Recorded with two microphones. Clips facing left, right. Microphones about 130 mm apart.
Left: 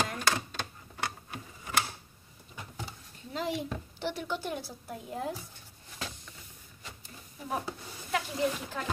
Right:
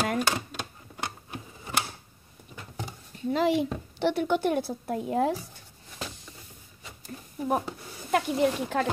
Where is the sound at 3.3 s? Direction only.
80° right.